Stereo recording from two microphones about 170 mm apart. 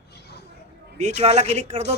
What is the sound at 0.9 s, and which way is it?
Speech, 45° right (ahead or behind).